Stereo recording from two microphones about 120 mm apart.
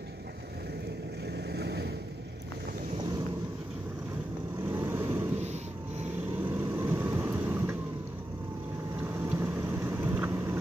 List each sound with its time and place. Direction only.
4.6 s vehicle: 15° right (ahead or behind)
6.5 s vehicle: 15° right (ahead or behind)
9.0 s vehicle: 15° right (ahead or behind)